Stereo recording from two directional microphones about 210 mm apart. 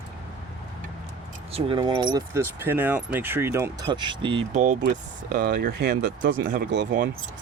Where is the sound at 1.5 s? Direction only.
25° right (ahead or behind); by 6.8 s 50° right (ahead or behind).